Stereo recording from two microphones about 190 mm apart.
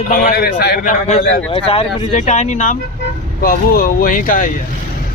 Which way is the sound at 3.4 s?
50° left (ahead or behind).